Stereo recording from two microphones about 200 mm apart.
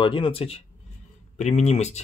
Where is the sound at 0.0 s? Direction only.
25° left (ahead or behind).